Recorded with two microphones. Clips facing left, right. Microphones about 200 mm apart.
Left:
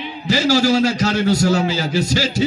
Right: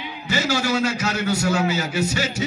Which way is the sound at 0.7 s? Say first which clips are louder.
Left 6 dB; 30° left (ahead or behind).